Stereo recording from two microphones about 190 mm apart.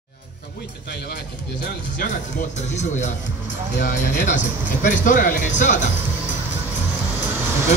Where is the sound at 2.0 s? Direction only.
40° left (ahead or behind).